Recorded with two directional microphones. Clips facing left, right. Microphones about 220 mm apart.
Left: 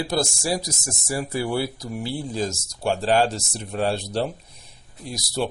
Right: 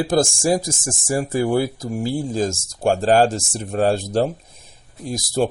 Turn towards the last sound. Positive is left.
turn(degrees=-45)  # may be behind; listen again after turning